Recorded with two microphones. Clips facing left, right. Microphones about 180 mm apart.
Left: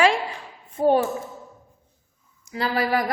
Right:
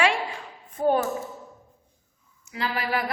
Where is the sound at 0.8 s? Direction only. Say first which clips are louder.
Left 4 dB; 25° left (ahead or behind).